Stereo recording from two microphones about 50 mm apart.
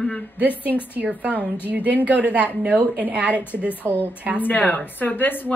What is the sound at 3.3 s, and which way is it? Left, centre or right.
Speech, left.